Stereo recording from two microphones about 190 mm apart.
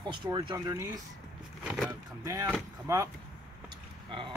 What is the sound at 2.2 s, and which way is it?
Speech, 15° right (ahead or behind).